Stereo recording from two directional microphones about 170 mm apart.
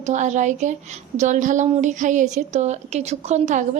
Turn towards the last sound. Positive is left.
turn(degrees=-40)  # may be behind; listen again after turning